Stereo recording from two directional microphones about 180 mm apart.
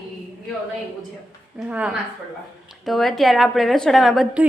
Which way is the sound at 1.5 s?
5° right (ahead or behind).